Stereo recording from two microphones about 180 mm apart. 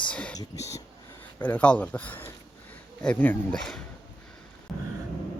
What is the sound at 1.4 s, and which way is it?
Speech, 10° left (ahead or behind).